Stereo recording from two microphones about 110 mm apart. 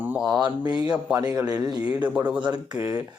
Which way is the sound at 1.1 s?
30° right (ahead or behind).